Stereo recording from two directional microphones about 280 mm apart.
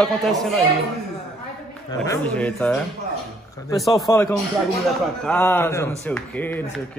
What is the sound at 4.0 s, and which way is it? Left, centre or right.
Speech, centre.